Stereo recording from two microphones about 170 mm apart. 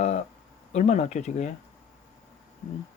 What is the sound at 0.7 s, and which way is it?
Speech, 40° left (ahead or behind).